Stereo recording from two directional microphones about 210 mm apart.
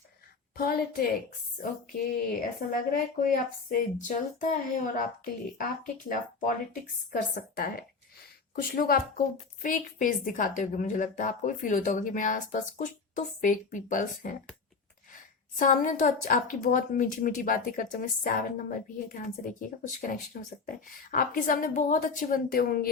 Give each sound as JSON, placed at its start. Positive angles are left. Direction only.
{"t": 0.5, "sound": "a woman's voice", "side_deg": 45}
{"t": 2.6, "sound": "a woman's voice", "side_deg": 40}
{"t": 15.5, "sound": "a woman's voice", "side_deg": 40}